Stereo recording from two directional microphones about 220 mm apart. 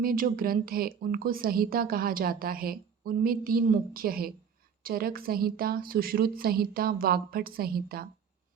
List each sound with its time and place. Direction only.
0.0 s a woman's voice: 40° right (ahead or behind)